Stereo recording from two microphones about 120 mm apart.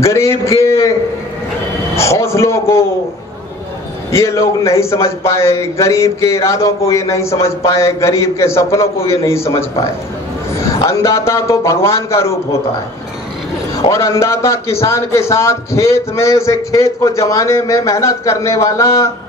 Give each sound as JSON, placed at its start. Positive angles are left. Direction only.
{"t": 0.0, "sound": "a man's voice", "side_deg": 25}
{"t": 2.0, "sound": "a man's voice", "side_deg": 25}
{"t": 4.1, "sound": "a man's voice", "side_deg": 25}
{"t": 10.5, "sound": "a man's voice", "side_deg": 25}
{"t": 13.8, "sound": "a man's voice", "side_deg": 25}